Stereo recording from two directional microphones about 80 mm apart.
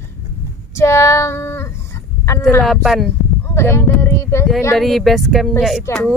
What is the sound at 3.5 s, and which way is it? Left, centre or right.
Speech, left.